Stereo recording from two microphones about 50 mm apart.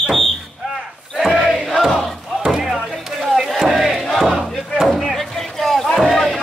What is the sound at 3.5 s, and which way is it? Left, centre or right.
Battle cry, centre.